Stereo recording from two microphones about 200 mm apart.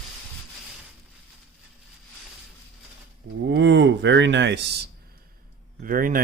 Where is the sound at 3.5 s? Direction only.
65° right (ahead or behind).